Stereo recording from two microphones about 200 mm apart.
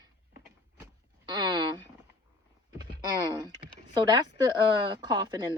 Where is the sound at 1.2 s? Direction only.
20° right (ahead or behind).